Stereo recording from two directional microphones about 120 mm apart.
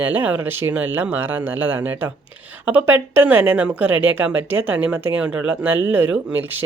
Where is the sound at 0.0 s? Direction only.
15° right (ahead or behind).